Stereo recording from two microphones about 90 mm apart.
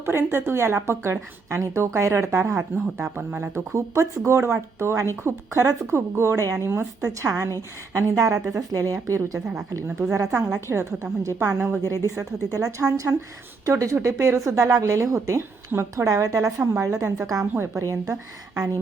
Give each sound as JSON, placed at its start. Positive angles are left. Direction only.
{"t": 0.0, "sound": "a woman's voice", "side_deg": -30}
{"t": 12.5, "sound": "a woman's voice", "side_deg": -40}